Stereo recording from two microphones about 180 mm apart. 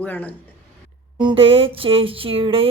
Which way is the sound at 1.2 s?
30° right (ahead or behind).